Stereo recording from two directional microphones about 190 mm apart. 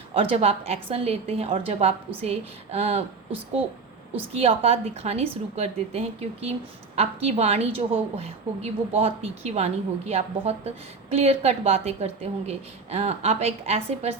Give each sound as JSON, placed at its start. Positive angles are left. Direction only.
{"t": 0.1, "sound": "a woman's voice", "side_deg": -30}